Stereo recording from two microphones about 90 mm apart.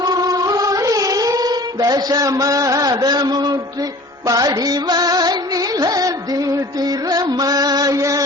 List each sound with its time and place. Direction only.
0.0 s music: 45° right (ahead or behind)